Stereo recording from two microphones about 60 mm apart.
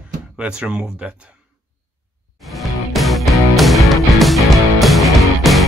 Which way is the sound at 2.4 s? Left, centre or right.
Centre.